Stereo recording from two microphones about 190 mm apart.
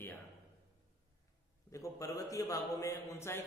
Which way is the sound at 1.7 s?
15° left (ahead or behind).